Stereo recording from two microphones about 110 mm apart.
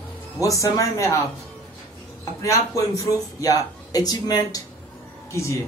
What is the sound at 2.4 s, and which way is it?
Speech, 30° left (ahead or behind).